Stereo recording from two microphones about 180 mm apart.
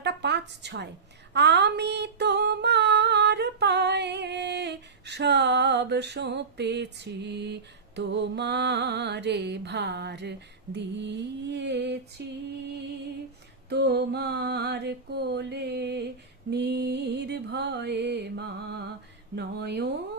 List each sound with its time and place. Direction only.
0.0 s a woman's voice: 70° right (ahead or behind)
1.3 s singing: 70° right (ahead or behind)
13.7 s mantra: 65° right (ahead or behind)
19.4 s speech: 65° right (ahead or behind)